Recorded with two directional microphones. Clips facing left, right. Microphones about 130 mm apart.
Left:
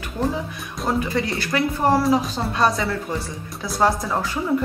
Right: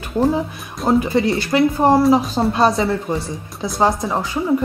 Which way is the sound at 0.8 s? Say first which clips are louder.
Right 7 dB; 30° right (ahead or behind).